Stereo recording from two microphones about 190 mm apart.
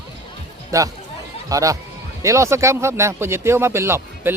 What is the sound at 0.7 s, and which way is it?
Speech, 15° right (ahead or behind).